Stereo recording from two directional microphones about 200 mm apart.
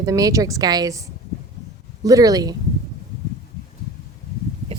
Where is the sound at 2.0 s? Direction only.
15° right (ahead or behind).